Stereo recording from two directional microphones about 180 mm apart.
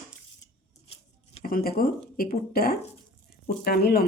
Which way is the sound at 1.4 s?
55° left (ahead or behind).